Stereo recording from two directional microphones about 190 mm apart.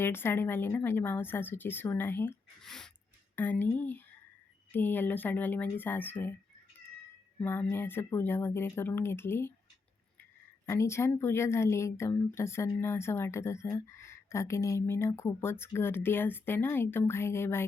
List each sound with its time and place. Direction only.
0.0 s a woman's voice: 10° left (ahead or behind)
2.6 s a sound: centre (ahead or behind)
3.3 s a woman's voice: 10° left (ahead or behind)
7.4 s a woman's voice: 10° left (ahead or behind)
10.7 s a woman's voice: 15° left (ahead or behind)